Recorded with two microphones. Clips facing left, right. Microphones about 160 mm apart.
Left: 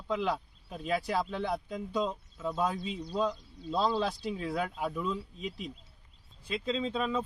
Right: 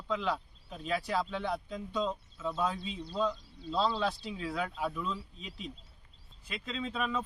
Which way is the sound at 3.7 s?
15° left (ahead or behind).